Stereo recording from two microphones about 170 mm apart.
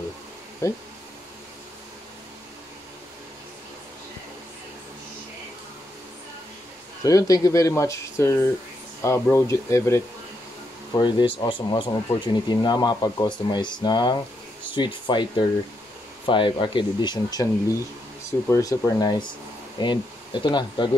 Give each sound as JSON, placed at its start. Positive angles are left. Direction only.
{"t": 0.6, "sound": "speech", "side_deg": 15}
{"t": 7.0, "sound": "speech", "side_deg": 20}
{"t": 11.0, "sound": "speech", "side_deg": 30}
{"t": 18.5, "sound": "speech", "side_deg": 20}